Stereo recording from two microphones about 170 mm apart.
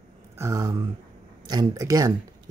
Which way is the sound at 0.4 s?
20° right (ahead or behind).